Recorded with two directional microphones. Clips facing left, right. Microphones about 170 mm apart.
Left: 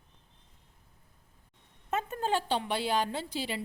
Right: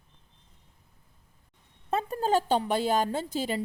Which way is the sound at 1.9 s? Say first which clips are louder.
Right 4 dB; 35° right (ahead or behind).